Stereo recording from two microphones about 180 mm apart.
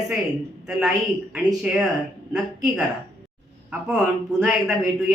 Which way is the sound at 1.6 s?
5° right (ahead or behind).